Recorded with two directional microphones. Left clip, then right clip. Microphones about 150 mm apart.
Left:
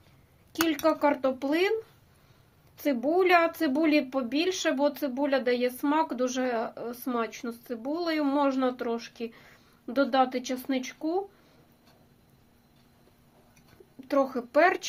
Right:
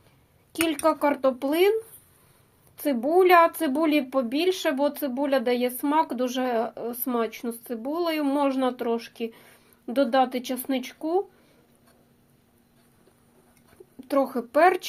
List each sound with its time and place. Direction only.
0.7 s speech: 20° right (ahead or behind)
2.7 s speech: 15° right (ahead or behind)
14.1 s speech: 20° right (ahead or behind)